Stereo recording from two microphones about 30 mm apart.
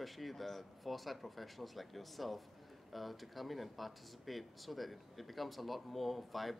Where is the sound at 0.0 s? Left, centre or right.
Centre.